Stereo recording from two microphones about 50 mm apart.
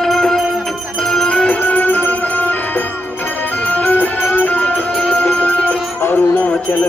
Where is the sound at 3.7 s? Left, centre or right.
Left.